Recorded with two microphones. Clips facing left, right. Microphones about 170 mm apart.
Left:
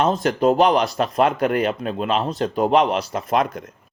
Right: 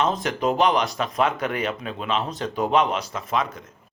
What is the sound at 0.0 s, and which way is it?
Speech, 40° left (ahead or behind).